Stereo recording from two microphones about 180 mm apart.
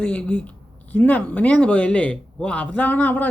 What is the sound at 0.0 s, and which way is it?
Speech, 5° left (ahead or behind).